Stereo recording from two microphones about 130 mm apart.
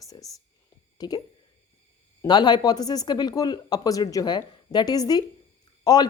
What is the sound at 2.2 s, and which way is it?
Speech, 30° left (ahead or behind).